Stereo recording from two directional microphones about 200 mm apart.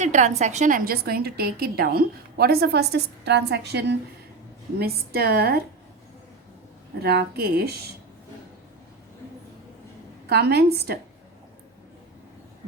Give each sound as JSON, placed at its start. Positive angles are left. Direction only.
{"t": 0.0, "sound": "a woman's voice", "side_deg": -35}
{"t": 7.0, "sound": "a woman's voice", "side_deg": -55}
{"t": 10.2, "sound": "a woman's voice", "side_deg": -50}